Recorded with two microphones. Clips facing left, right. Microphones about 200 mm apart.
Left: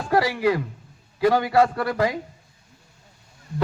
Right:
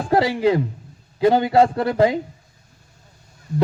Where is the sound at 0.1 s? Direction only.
25° right (ahead or behind).